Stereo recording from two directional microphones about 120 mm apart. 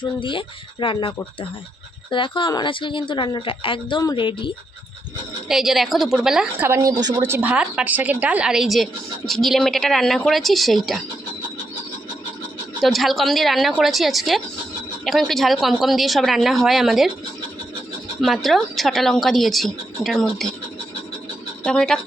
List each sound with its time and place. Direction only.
0.0 s speech: 45° left (ahead or behind)
5.5 s a woman's voice: 5° right (ahead or behind)
6.6 s a woman's voice: 20° right (ahead or behind); by 11.0 s centre (ahead or behind)
12.8 s a woman's voice: centre (ahead or behind)
18.2 s a woman's voice: centre (ahead or behind)
21.6 s speech: 5° left (ahead or behind)